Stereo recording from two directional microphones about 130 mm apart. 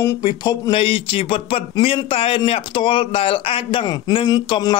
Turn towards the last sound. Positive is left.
turn(degrees=35)  # may be behind; listen again after turning